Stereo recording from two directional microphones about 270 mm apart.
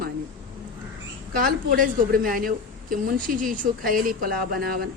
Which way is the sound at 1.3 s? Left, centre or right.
Right.